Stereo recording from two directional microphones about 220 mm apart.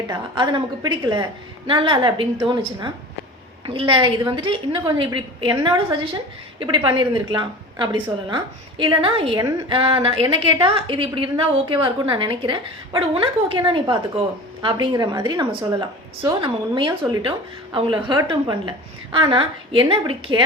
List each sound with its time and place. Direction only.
0.1 s a woman's voice: 20° right (ahead or behind)